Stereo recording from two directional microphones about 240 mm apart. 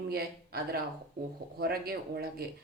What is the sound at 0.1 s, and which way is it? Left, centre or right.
Speech, right.